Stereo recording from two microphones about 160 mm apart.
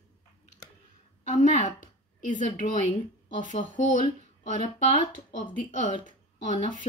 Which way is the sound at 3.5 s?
55° left (ahead or behind).